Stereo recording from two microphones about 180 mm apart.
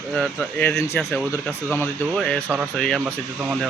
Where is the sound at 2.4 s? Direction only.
15° right (ahead or behind).